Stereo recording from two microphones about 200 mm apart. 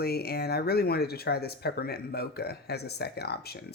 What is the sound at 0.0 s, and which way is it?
Speech, 50° left (ahead or behind).